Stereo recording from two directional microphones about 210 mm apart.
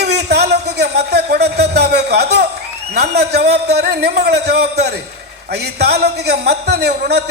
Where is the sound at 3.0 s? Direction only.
50° right (ahead or behind).